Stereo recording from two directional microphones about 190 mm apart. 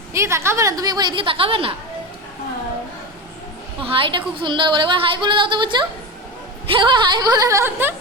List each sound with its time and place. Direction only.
0.1 s a woman's voice: 15° right (ahead or behind)
3.8 s a woman's voice: 25° right (ahead or behind); by 7.9 s 10° right (ahead or behind)